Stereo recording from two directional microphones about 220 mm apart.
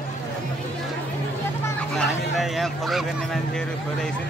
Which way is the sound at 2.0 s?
Centre (ahead or behind).